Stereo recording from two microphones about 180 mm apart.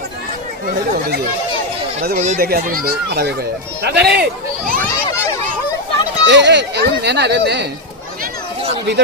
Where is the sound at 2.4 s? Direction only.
55° right (ahead or behind).